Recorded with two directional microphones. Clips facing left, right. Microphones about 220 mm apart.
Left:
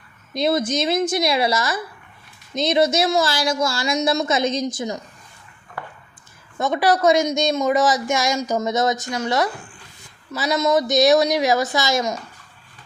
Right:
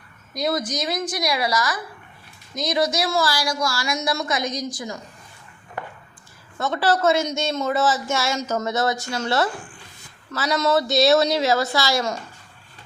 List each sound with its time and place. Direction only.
0.3 s speech: 25° left (ahead or behind)
5.8 s a sound: 20° right (ahead or behind)
6.6 s speech: 15° left (ahead or behind)